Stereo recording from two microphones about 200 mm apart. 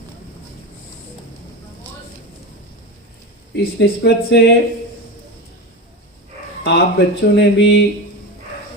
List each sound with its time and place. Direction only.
3.5 s speech: 60° left (ahead or behind)
6.7 s speech: 55° left (ahead or behind)